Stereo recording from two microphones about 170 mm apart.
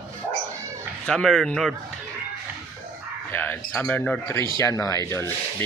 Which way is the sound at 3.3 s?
10° left (ahead or behind).